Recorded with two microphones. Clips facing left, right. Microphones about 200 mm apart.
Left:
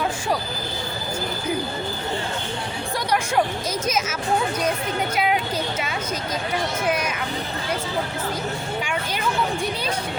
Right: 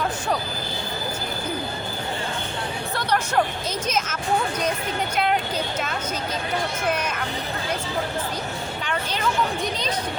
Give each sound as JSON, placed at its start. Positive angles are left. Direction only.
{"t": 3.8, "sound": "speech", "side_deg": 10}